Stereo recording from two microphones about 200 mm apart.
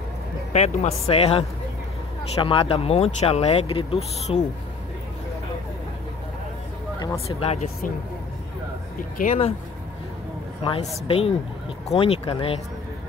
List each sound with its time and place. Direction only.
0.5 s speech: 35° left (ahead or behind)
2.4 s speech: 25° left (ahead or behind)
7.2 s speech: 30° left (ahead or behind)
9.2 s speech: 40° left (ahead or behind)
10.6 s speech: 25° left (ahead or behind)